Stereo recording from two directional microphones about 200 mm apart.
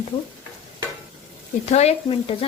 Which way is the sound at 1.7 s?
30° left (ahead or behind).